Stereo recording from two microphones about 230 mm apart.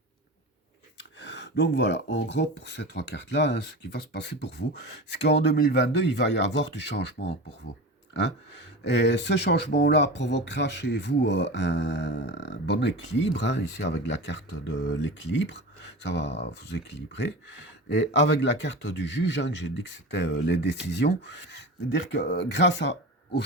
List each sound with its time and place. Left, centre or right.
0.9 s speech: left
8.8 s speech: left